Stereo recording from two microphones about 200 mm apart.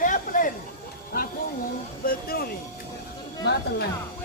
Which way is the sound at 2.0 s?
45° left (ahead or behind).